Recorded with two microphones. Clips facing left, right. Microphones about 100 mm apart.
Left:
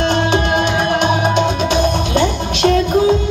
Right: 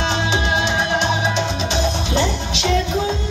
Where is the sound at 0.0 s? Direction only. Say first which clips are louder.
Left 5 dB; 55° left (ahead or behind).